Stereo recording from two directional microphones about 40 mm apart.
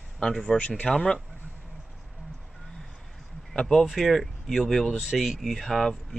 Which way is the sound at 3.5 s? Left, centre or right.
Centre.